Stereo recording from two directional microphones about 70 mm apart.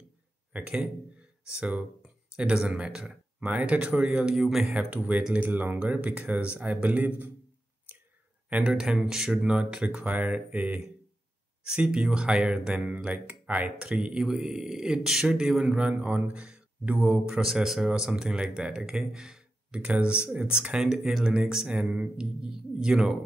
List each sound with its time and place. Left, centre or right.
0.5 s speech: centre
4.4 s speech: centre
4.7 s speech: centre
8.5 s speech: centre
11.6 s speech: centre
17.4 s speech: centre